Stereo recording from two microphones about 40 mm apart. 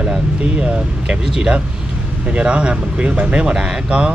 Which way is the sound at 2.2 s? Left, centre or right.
Right.